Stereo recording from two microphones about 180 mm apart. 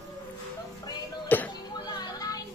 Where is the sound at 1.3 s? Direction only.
10° left (ahead or behind).